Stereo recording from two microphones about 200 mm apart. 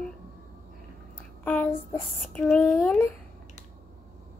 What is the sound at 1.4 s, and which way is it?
A child's voice, 5° left (ahead or behind).